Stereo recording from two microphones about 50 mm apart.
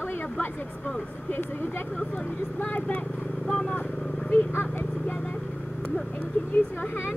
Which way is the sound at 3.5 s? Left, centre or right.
Centre.